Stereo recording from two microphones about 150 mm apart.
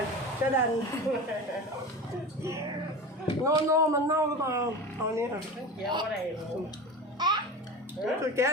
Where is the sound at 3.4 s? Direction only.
20° right (ahead or behind).